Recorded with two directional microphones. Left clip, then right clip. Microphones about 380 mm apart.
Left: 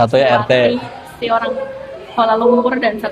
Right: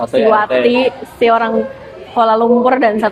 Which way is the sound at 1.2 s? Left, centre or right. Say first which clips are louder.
Right 5 dB; right.